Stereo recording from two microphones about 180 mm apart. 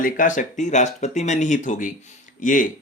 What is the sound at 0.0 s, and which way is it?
Speech, 45° left (ahead or behind).